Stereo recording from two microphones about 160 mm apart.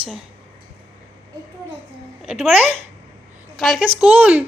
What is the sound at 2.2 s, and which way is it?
Speech, 10° right (ahead or behind).